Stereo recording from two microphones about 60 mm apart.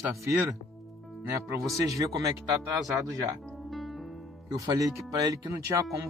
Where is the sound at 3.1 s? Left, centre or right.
Right.